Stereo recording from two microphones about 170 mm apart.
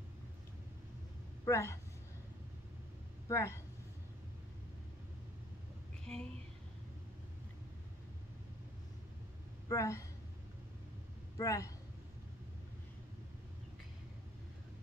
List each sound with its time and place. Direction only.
1.4 s speech: 15° left (ahead or behind)
3.3 s speech: 15° left (ahead or behind)
6.1 s a sound: 5° left (ahead or behind)
9.7 s a woman's voice: 20° left (ahead or behind)
11.3 s a man's voice: 20° left (ahead or behind)